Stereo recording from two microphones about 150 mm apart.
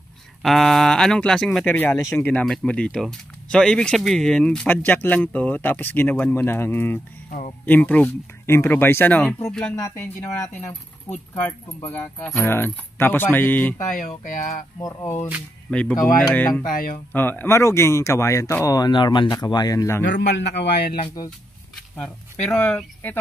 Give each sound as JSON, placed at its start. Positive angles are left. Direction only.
{"t": 0.4, "sound": "speech", "side_deg": 0}
{"t": 7.2, "sound": "a sound", "side_deg": 60}
{"t": 7.6, "sound": "speech", "side_deg": 10}
{"t": 9.8, "sound": "speech", "side_deg": 20}
{"t": 13.9, "sound": "speech", "side_deg": 65}
{"t": 14.8, "sound": "speech", "side_deg": 20}
{"t": 15.7, "sound": "speech", "side_deg": 10}
{"t": 16.6, "sound": "speech", "side_deg": 70}
{"t": 17.1, "sound": "speech", "side_deg": 15}
{"t": 20.7, "sound": "speech", "side_deg": 90}
{"t": 21.9, "sound": "speech", "side_deg": 5}